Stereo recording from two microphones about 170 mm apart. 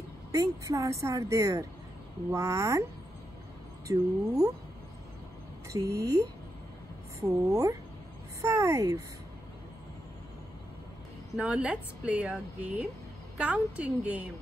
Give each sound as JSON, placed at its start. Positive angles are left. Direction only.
{"t": 0.3, "sound": "a woman's voice", "side_deg": -20}
{"t": 3.8, "sound": "a woman's voice", "side_deg": -20}
{"t": 5.7, "sound": "a woman's voice", "side_deg": -20}
{"t": 11.3, "sound": "a woman's voice", "side_deg": -5}